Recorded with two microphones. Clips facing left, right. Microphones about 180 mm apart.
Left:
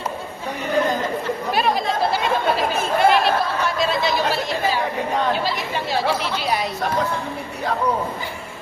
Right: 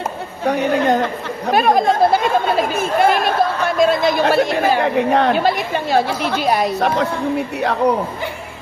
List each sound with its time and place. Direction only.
0.4 s speech: 70° right (ahead or behind)
1.5 s a man's voice: 50° right (ahead or behind); by 8.0 s 65° right (ahead or behind)